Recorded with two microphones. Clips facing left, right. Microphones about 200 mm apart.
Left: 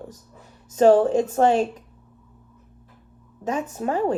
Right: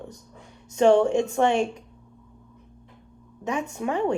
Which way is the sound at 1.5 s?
5° left (ahead or behind).